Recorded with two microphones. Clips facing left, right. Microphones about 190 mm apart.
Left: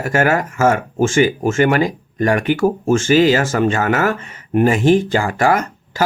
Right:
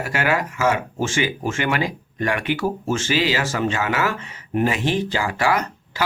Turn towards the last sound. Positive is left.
turn(degrees=45)  # may be behind; listen again after turning